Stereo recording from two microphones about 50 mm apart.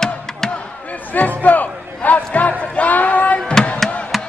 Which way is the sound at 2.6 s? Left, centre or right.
Left.